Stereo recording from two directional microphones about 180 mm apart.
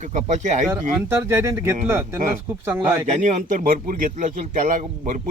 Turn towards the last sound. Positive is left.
turn(degrees=-45)  # may be behind; listen again after turning